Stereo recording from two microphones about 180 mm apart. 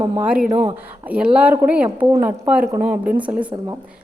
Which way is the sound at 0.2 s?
5° right (ahead or behind).